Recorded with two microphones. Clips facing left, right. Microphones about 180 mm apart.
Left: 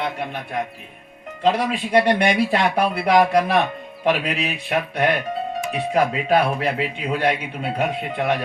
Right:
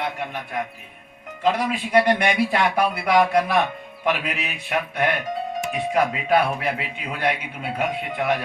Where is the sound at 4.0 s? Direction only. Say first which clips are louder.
Left 4 dB; 30° left (ahead or behind).